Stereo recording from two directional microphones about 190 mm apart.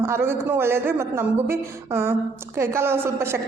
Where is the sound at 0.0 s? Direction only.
10° right (ahead or behind).